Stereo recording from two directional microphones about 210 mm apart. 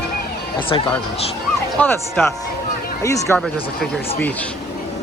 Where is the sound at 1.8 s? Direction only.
10° left (ahead or behind).